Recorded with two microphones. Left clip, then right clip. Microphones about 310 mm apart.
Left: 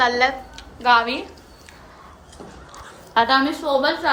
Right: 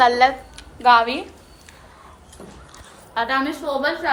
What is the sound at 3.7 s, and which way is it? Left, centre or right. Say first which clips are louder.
Speech: left 6 dB; centre.